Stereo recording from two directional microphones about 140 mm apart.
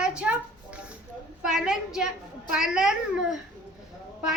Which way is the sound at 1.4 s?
5° right (ahead or behind).